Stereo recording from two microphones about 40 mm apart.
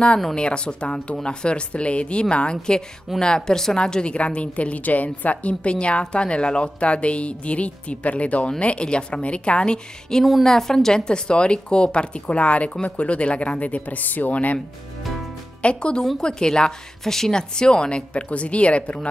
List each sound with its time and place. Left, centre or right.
0.3 s a woman's voice: left
11.1 s a woman's voice: left
15.6 s speech: left